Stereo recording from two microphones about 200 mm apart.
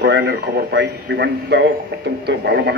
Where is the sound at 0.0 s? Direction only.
55° right (ahead or behind).